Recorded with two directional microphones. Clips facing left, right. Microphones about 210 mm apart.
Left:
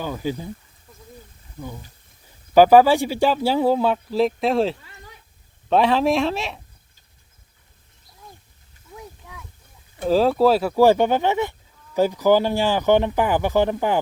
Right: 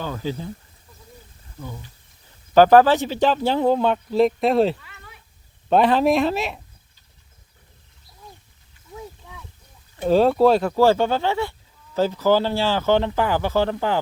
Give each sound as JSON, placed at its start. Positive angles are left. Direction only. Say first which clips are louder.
{"t": 0.0, "sound": "speech", "louder": "left 1 dB", "side_deg": 10}
{"t": 1.5, "sound": "speech", "louder": "left 1 dB", "side_deg": 15}
{"t": 4.8, "sound": "a sound", "louder": "left 2 dB", "side_deg": 35}
{"t": 5.6, "sound": "speech", "louder": "right 1 dB", "side_deg": 0}
{"t": 9.0, "sound": "a sound", "louder": "right 3 dB", "side_deg": 5}
{"t": 10.1, "sound": "speech", "louder": "right 1 dB", "side_deg": 0}